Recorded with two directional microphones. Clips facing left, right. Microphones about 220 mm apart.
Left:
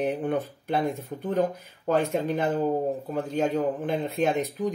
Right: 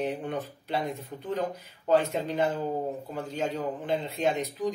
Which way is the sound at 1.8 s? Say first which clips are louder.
Left 1 dB; 55° left (ahead or behind).